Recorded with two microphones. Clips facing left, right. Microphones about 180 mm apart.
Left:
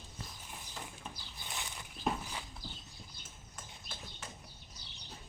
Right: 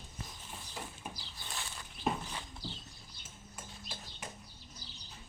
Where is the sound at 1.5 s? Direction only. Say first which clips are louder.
Even; 15° left (ahead or behind).